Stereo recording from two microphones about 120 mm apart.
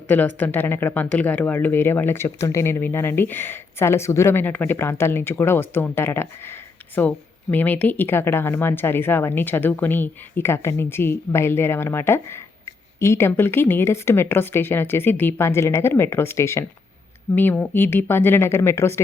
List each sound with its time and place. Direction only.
0.1 s speech: 15° left (ahead or behind)